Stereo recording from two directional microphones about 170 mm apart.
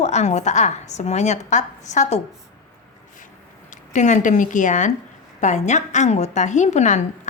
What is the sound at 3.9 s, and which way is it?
A woman's voice, 45° left (ahead or behind).